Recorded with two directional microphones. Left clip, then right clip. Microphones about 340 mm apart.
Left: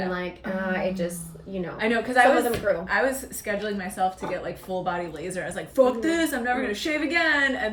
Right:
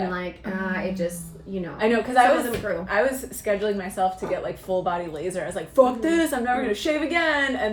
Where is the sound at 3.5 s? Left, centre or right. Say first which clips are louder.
Right 5 dB; centre.